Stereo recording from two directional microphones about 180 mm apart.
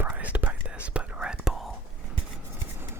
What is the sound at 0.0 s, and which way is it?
Whispering, 10° right (ahead or behind).